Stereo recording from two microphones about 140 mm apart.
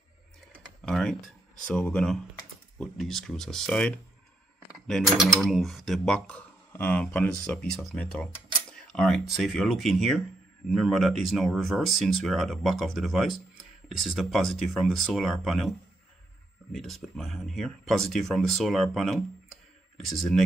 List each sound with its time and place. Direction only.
0.8 s speech: 5° left (ahead or behind)
1.7 s mechanisms: 5° left (ahead or behind)
16.7 s mechanisms: centre (ahead or behind)